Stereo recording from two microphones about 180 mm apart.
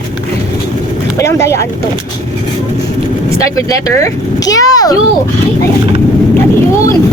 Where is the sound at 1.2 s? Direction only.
15° left (ahead or behind).